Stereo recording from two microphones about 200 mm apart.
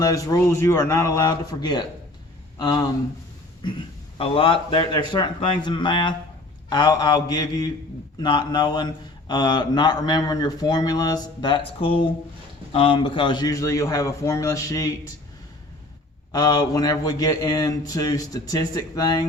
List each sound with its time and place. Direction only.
0.0 s a man's voice: 15° left (ahead or behind)
4.2 s a man's voice: 25° left (ahead or behind)
16.3 s a man's voice: 20° left (ahead or behind)